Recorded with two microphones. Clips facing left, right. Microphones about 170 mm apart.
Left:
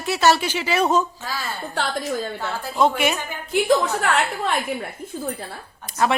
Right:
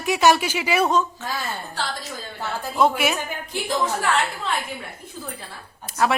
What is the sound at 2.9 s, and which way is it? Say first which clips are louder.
Speech: left 1 dB; 5° right (ahead or behind).